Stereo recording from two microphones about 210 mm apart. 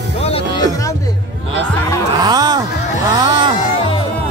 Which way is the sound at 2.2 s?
20° right (ahead or behind).